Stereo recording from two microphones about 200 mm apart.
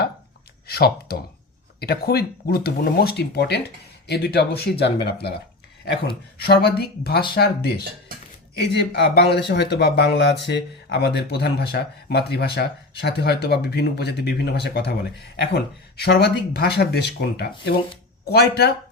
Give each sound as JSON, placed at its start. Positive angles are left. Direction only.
{"t": 0.7, "sound": "speech", "side_deg": 50}
{"t": 6.4, "sound": "speech", "side_deg": 55}